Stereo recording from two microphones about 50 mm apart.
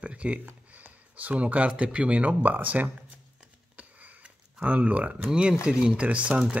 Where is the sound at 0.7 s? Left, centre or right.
Right.